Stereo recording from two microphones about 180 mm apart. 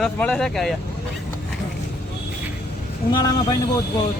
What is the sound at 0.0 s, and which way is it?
Speech, 5° left (ahead or behind).